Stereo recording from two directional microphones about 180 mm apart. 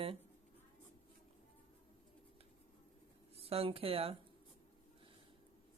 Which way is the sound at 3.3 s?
35° right (ahead or behind).